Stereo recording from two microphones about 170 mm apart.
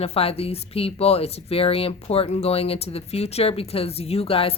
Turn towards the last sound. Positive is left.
turn(degrees=35)  # may be behind; listen again after turning